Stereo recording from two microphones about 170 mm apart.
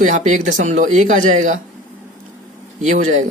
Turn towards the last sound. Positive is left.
turn(degrees=-45)  # may be behind; listen again after turning